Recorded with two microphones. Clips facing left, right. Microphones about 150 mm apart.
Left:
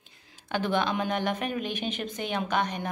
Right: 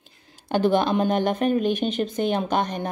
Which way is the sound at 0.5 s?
35° right (ahead or behind).